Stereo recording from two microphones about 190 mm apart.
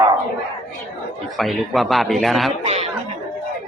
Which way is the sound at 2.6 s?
30° right (ahead or behind).